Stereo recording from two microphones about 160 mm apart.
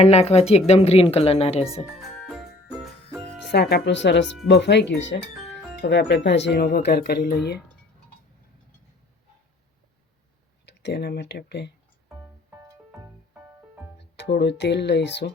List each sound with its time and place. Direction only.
0.0 s a woman's voice: 40° left (ahead or behind)
2.0 s music: 5° right (ahead or behind)
3.5 s speech: 90° left
10.7 s speech: 90° left
12.5 s music: 20° right (ahead or behind)
14.0 s speech: 90° left